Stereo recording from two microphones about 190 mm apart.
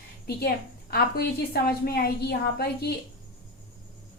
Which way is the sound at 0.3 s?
55° left (ahead or behind).